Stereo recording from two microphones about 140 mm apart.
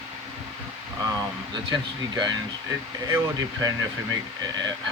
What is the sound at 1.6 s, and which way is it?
Speech, 30° right (ahead or behind).